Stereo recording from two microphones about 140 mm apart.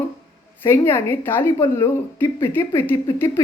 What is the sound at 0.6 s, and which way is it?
Speech, 15° left (ahead or behind).